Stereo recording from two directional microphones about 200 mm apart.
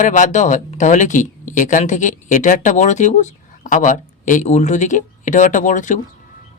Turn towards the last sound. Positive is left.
turn(degrees=40)  # may be behind; listen again after turning